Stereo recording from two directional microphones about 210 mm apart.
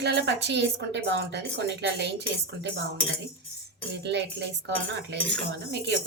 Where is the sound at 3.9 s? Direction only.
55° right (ahead or behind).